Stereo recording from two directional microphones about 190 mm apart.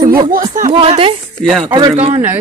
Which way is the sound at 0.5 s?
40° right (ahead or behind).